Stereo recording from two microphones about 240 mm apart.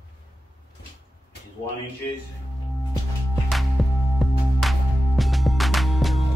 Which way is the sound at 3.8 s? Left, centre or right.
Centre.